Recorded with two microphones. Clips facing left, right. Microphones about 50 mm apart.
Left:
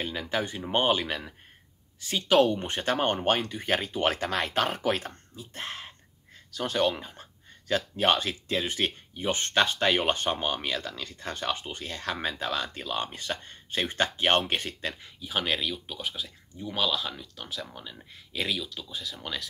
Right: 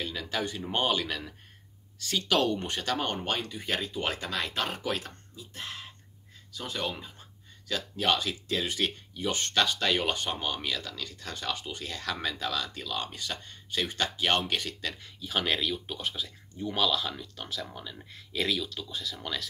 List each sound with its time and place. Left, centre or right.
0.0 s speech: left
6.5 s speech: left
15.0 s speech: centre